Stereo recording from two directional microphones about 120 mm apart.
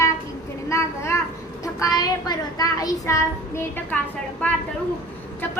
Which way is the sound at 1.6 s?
30° left (ahead or behind).